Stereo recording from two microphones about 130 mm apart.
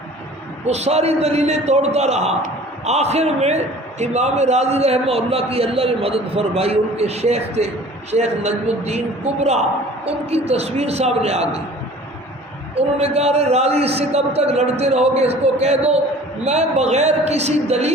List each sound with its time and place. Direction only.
0.7 s a man's voice: 55° right (ahead or behind)
13.0 s a man's voice: 55° right (ahead or behind)